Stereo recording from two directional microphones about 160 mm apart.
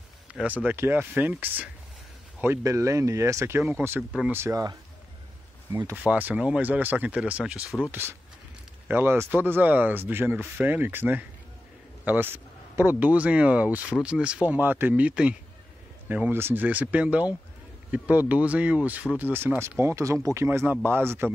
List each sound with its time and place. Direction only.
0.3 s speech: 10° right (ahead or behind)